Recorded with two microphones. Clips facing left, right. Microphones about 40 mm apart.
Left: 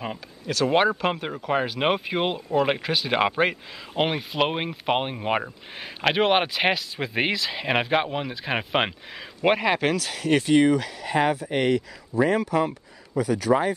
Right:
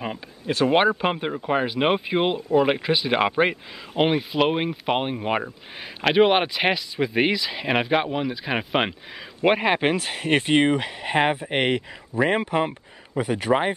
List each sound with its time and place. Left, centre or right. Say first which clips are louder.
0.7 s speech: right 1 dB; centre
9.6 s speech: right 1 dB; right